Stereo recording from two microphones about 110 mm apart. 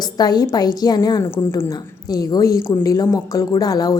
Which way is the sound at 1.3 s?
20° left (ahead or behind).